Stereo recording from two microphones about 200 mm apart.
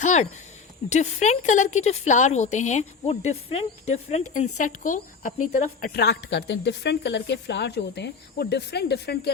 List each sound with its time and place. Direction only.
0.0 s a woman's voice: 35° left (ahead or behind); by 9.3 s 55° left (ahead or behind)